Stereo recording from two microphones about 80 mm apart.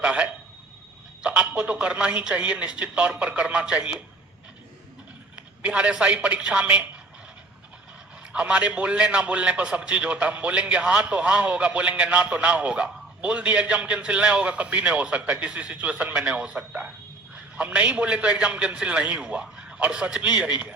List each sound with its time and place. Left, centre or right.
0.0 s a man's voice: centre
5.6 s a man's voice: centre
8.3 s a man's voice: centre